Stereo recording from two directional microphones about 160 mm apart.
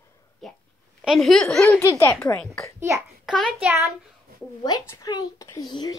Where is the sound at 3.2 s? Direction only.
Centre (ahead or behind).